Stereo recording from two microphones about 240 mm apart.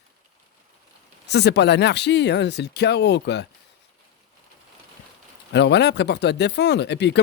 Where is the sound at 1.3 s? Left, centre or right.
Left.